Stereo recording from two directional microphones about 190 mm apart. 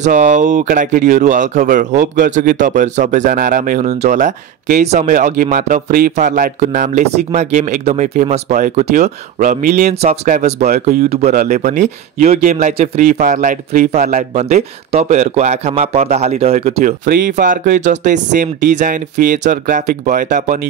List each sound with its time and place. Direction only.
0.0 s speech: 40° right (ahead or behind)
10.7 s speech: 50° right (ahead or behind)
11.3 s speech: 40° right (ahead or behind)